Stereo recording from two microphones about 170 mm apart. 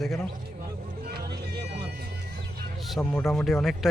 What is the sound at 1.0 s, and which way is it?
Music, 70° right (ahead or behind).